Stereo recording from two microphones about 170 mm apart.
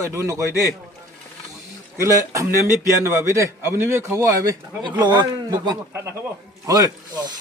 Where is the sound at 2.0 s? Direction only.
20° right (ahead or behind).